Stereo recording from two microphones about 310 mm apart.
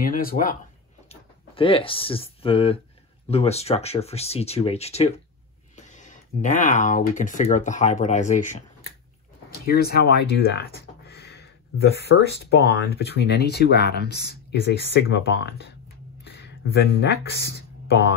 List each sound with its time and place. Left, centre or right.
0.0 s speech: left
9.7 s speech: left
12.1 s speech: left